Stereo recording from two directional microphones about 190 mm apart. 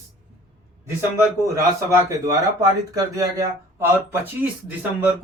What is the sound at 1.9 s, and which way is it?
Speech, 15° right (ahead or behind).